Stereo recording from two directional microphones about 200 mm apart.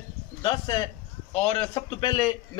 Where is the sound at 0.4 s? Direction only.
20° left (ahead or behind).